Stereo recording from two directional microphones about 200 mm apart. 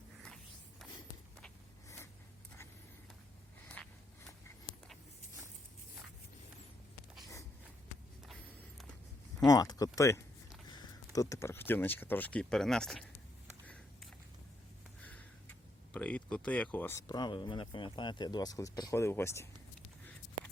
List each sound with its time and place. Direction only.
9.5 s speech: 20° left (ahead or behind); by 13.1 s centre (ahead or behind)
15.0 s speech: 10° left (ahead or behind)